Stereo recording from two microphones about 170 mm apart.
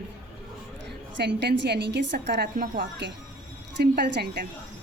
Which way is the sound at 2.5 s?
50° right (ahead or behind).